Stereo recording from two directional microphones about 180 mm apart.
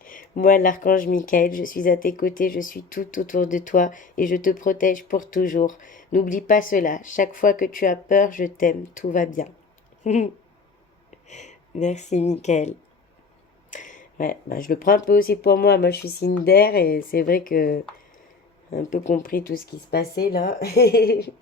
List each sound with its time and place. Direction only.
0.0 s speech: 50° left (ahead or behind)
11.3 s speech: 40° left (ahead or behind); by 21.2 s 60° left (ahead or behind)